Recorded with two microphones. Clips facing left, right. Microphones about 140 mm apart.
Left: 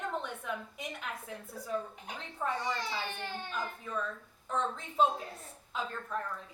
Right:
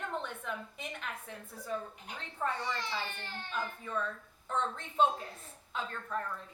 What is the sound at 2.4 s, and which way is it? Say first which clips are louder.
A woman's voice: left 1 dB; 5° left (ahead or behind).